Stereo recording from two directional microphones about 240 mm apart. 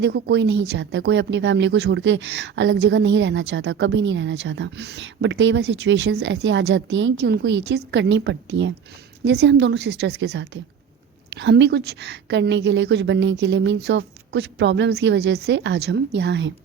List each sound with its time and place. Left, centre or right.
0.0 s speech: right